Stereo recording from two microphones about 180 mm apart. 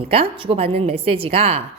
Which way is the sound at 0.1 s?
30° right (ahead or behind).